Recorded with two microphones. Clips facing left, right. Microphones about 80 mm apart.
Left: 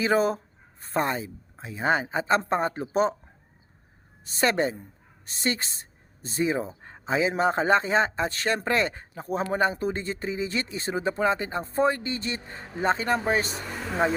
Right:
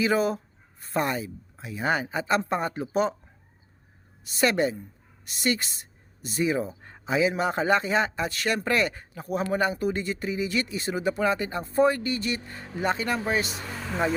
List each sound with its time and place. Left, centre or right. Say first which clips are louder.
0.0 s a man's voice: left 1 dB; left
4.2 s a man's voice: right 1 dB; left